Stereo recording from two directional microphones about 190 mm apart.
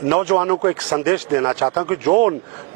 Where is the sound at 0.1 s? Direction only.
15° right (ahead or behind).